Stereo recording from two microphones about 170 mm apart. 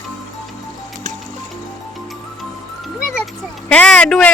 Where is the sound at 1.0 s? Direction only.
50° right (ahead or behind).